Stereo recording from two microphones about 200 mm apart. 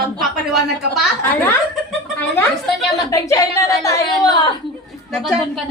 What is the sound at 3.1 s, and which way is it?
A woman's voice, 15° left (ahead or behind).